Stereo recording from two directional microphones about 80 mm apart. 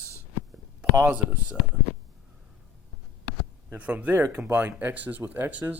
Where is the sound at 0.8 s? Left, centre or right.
Centre.